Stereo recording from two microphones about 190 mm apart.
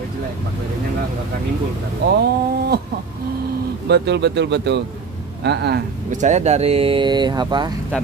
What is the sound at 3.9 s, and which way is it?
Speech, 65° right (ahead or behind).